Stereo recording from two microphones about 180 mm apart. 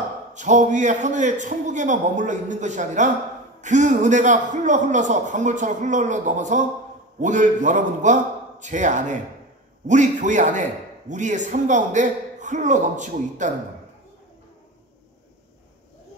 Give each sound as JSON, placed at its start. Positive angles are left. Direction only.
{"t": 0.3, "sound": "a man's voice", "side_deg": -40}